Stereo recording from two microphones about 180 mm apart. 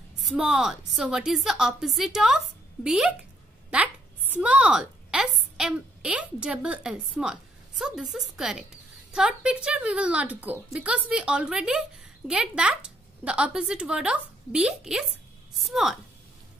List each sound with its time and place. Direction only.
0.2 s a woman's voice: 5° right (ahead or behind)
4.3 s a woman's voice: 5° right (ahead or behind)